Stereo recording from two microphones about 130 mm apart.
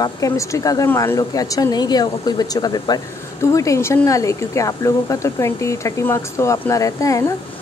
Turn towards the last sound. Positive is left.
turn(degrees=25)  # may be behind; listen again after turning